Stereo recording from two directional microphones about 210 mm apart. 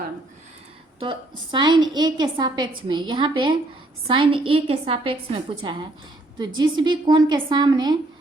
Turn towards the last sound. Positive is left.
turn(degrees=-20)  # may be behind; listen again after turning